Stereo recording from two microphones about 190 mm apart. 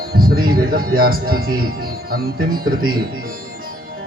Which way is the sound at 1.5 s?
50° right (ahead or behind).